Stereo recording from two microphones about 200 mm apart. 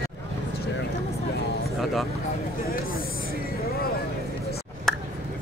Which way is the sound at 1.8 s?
Centre (ahead or behind).